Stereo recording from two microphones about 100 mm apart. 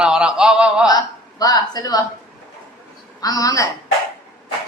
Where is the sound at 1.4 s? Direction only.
40° left (ahead or behind).